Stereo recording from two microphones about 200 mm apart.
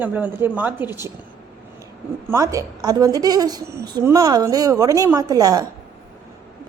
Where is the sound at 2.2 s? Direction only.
15° right (ahead or behind).